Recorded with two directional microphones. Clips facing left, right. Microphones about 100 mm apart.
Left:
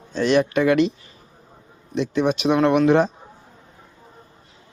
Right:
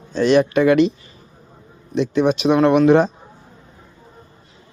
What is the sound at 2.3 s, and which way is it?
Speech, 25° right (ahead or behind).